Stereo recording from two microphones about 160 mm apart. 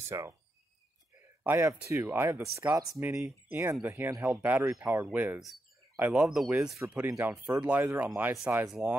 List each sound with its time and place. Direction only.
0.1 s speech: 20° right (ahead or behind)
1.4 s speech: 15° right (ahead or behind)